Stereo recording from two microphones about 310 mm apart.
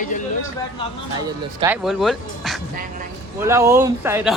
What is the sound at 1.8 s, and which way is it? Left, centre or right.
Speech, centre.